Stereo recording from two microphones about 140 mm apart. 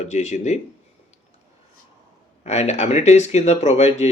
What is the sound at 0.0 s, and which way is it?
Speech, 55° left (ahead or behind).